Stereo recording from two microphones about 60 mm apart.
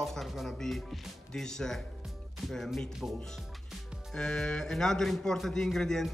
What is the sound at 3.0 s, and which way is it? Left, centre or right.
Speech, centre.